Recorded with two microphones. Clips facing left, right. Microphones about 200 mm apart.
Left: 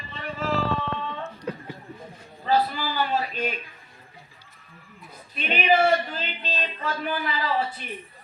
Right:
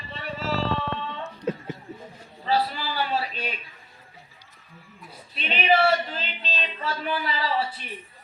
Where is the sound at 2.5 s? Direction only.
45° left (ahead or behind).